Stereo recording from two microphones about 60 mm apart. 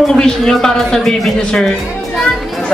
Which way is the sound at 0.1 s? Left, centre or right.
Centre.